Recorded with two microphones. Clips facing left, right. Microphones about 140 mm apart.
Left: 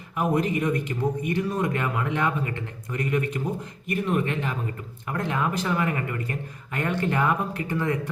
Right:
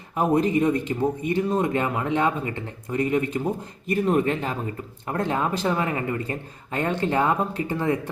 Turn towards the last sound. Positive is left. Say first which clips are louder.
# right 2 dB
turn(degrees=-25)  # may be behind; listen again after turning